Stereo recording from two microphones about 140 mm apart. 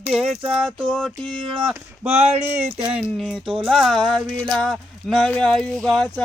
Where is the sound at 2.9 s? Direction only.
5° right (ahead or behind).